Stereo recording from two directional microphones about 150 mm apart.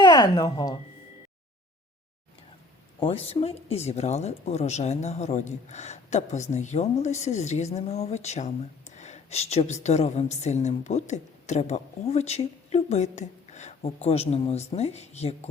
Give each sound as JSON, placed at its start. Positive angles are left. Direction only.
{"t": 0.0, "sound": "speech", "side_deg": 25}
{"t": 3.0, "sound": "a woman's voice", "side_deg": 40}
{"t": 9.0, "sound": "a sound", "side_deg": 50}
{"t": 9.8, "sound": "a woman's voice", "side_deg": 50}